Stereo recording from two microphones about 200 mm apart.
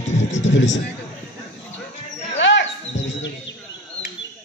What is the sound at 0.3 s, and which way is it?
Speech, 65° left (ahead or behind).